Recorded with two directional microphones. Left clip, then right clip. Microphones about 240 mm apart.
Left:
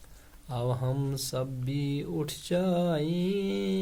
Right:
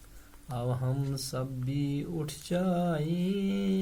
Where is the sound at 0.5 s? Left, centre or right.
Left.